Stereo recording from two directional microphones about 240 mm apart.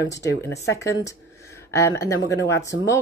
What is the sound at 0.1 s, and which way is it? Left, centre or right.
Speech, centre.